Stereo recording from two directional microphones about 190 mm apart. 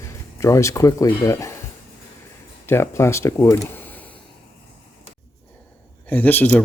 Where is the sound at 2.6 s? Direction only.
15° left (ahead or behind).